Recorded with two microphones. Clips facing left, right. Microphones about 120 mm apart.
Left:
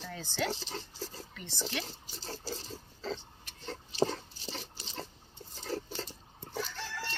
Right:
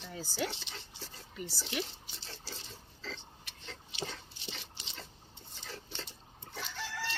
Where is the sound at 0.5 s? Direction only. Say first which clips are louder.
Left 8 dB; 40° left (ahead or behind).